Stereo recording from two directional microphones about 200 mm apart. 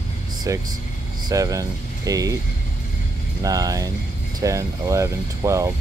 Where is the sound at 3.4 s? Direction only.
20° right (ahead or behind).